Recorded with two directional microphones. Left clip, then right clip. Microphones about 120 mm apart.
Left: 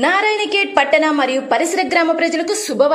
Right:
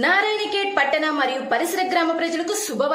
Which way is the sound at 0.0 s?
45° left (ahead or behind).